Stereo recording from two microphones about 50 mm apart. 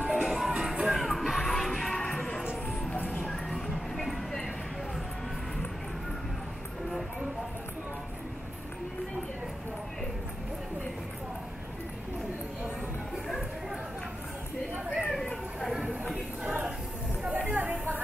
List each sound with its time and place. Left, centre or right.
0.1 s music: centre
0.8 s music: centre
3.6 s music: centre
17.3 s a sound: right